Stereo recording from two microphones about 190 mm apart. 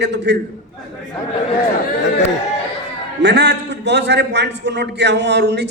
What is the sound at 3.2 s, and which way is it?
A man's voice, 65° right (ahead or behind).